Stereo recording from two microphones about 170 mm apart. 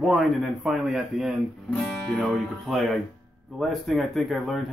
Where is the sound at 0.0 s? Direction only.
Centre (ahead or behind).